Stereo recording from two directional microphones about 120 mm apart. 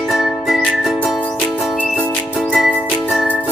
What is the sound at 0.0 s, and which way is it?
Music, centre (ahead or behind).